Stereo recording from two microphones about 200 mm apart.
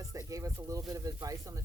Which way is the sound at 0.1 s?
15° right (ahead or behind).